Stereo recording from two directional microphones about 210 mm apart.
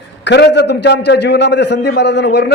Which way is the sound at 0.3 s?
55° left (ahead or behind).